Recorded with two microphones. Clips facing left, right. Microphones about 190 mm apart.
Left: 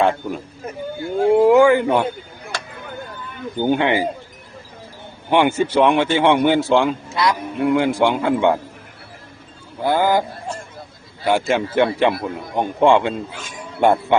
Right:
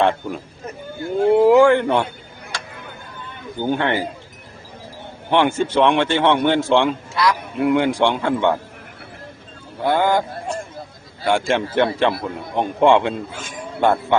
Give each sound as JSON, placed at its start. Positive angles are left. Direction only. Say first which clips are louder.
{"t": 0.0, "sound": "a man's voice", "louder": "even", "side_deg": 0}
{"t": 3.6, "sound": "a man's voice", "louder": "left 3 dB", "side_deg": 15}
{"t": 5.3, "sound": "a man's voice", "louder": "left 1 dB", "side_deg": 10}
{"t": 7.1, "sound": "a man's voice", "louder": "even", "side_deg": 20}
{"t": 7.5, "sound": "a man's voice", "louder": "even", "side_deg": 0}
{"t": 9.8, "sound": "a man's voice", "louder": "left 1 dB", "side_deg": 0}
{"t": 11.3, "sound": "a man's voice", "louder": "left 1 dB", "side_deg": 5}
{"t": 13.8, "sound": "a man's voice", "louder": "left 2 dB", "side_deg": 15}